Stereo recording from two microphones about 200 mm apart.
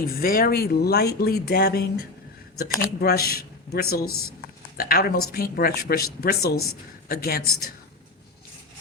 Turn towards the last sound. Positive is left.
turn(degrees=50)  # may be behind; listen again after turning